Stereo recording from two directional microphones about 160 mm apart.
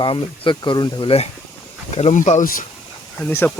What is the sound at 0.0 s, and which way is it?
Speech, 30° left (ahead or behind).